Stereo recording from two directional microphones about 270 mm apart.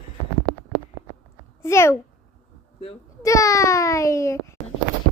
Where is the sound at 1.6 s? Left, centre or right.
Centre.